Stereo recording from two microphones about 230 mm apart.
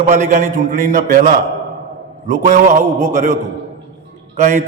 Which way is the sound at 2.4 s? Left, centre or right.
Right.